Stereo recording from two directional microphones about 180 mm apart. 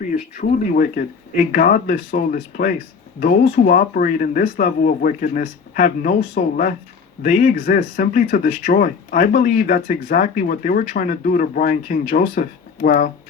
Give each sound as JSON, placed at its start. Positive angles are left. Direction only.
{"t": 0.4, "sound": "speech", "side_deg": 50}